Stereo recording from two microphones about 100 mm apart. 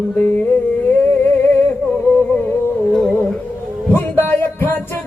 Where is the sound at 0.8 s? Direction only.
20° left (ahead or behind).